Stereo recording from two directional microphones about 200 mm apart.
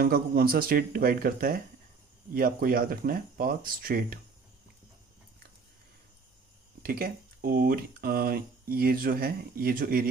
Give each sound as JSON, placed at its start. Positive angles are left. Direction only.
{"t": 0.0, "sound": "speech", "side_deg": -50}
{"t": 6.8, "sound": "speech", "side_deg": -45}